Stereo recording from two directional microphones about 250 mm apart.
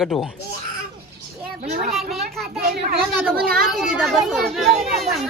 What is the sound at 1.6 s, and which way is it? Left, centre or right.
Speech, right.